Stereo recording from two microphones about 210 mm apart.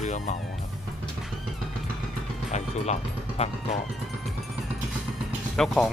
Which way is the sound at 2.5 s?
30° left (ahead or behind).